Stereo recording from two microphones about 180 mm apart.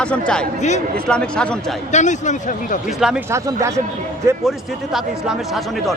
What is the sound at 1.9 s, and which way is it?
Speech, 40° left (ahead or behind).